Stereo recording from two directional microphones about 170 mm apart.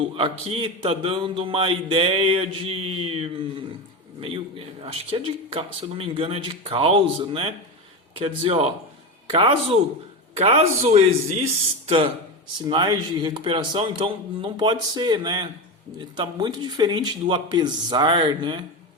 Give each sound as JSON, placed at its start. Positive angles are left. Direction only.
{"t": 0.2, "sound": "a man's voice", "side_deg": -30}